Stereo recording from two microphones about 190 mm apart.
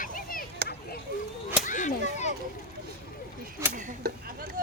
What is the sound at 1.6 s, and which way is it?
Whip, 40° left (ahead or behind).